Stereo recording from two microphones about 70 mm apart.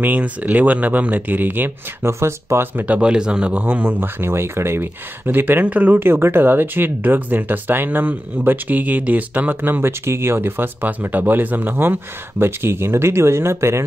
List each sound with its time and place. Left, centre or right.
0.0 s speech: right
2.0 s speech: right